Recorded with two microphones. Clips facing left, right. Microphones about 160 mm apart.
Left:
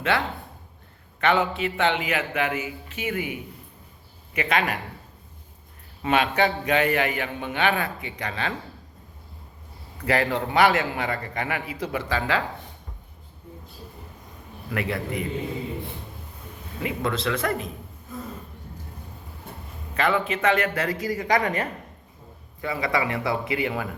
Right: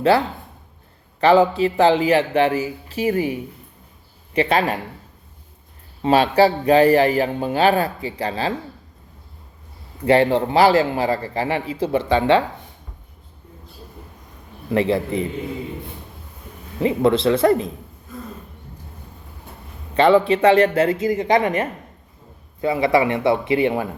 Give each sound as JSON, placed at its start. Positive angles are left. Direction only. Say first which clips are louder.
{"t": 0.0, "sound": "a man's voice", "louder": "right 8 dB", "side_deg": -35}
{"t": 4.4, "sound": "a man's voice", "louder": "right 6 dB", "side_deg": -30}
{"t": 6.0, "sound": "a man's voice", "louder": "right 7 dB", "side_deg": -30}
{"t": 10.0, "sound": "a man's voice", "louder": "right 8 dB", "side_deg": -30}
{"t": 14.7, "sound": "a man's voice", "louder": "right 9 dB", "side_deg": -30}
{"t": 16.8, "sound": "a man's voice", "louder": "right 10 dB", "side_deg": -30}
{"t": 19.9, "sound": "a man's voice", "louder": "right 10 dB", "side_deg": -30}